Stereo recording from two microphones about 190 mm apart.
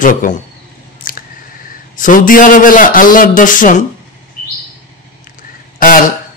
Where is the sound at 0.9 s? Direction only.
45° left (ahead or behind).